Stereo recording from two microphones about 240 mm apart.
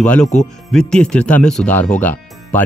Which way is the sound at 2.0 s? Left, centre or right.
Centre.